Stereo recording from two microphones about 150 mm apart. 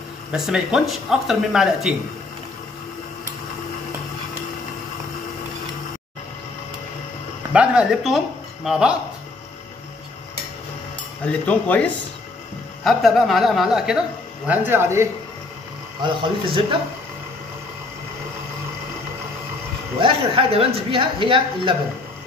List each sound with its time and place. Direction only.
0.3 s speech: 5° right (ahead or behind)
7.5 s speech: 5° right (ahead or behind)
11.2 s speech: 10° left (ahead or behind)
12.8 s speech: centre (ahead or behind)
14.5 s speech: 15° right (ahead or behind)
16.0 s a woman's voice: 35° right (ahead or behind)
20.0 s a woman's voice: 40° right (ahead or behind)